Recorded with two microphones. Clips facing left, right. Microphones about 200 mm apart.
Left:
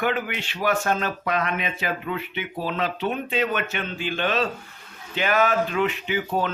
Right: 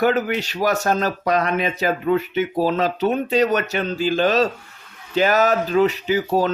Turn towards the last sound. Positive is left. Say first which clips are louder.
# right 6 dB
turn(degrees=-40)  # may be behind; listen again after turning